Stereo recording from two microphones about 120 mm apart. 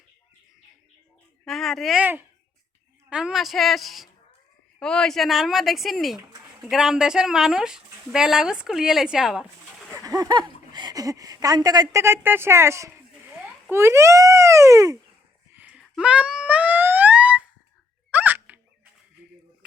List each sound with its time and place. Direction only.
1.5 s speech: centre (ahead or behind)
3.1 s speech: 5° right (ahead or behind)
10.0 s speech: 30° right (ahead or behind)
15.5 s a sound: 10° right (ahead or behind)
18.1 s hiccup: 15° right (ahead or behind)